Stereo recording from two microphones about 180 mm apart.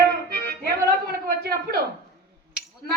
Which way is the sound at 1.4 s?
55° right (ahead or behind).